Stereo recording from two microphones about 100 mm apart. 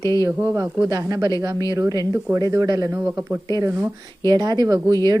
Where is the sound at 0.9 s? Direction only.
40° right (ahead or behind).